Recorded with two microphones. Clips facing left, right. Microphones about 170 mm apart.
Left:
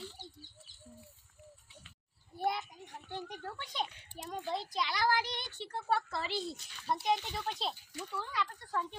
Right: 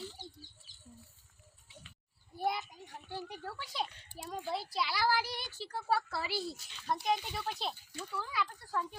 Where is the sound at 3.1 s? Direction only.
5° right (ahead or behind).